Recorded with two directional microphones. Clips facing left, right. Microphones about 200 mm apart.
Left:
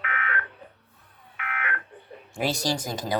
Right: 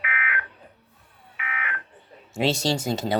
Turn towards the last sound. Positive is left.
turn(degrees=-25)  # may be behind; listen again after turning